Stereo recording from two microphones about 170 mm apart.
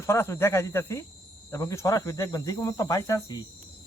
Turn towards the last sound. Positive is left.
turn(degrees=20)  # may be behind; listen again after turning